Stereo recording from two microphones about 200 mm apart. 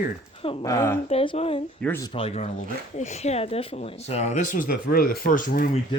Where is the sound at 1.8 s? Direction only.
15° left (ahead or behind).